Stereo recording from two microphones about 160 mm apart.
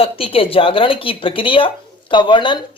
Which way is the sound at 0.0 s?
35° left (ahead or behind).